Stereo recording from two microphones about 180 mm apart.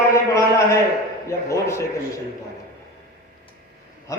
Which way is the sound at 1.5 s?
15° left (ahead or behind).